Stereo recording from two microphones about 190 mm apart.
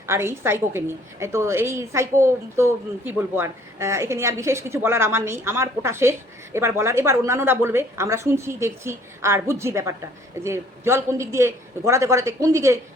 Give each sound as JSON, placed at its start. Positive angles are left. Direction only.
{"t": 0.1, "sound": "a woman's voice", "side_deg": -15}